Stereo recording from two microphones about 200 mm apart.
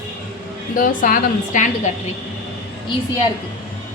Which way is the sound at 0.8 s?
45° left (ahead or behind).